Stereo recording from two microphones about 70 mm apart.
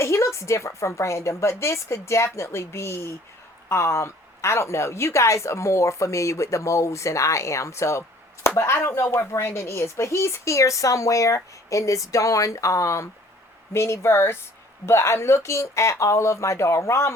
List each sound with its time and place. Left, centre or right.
0.0 s a woman's voice: left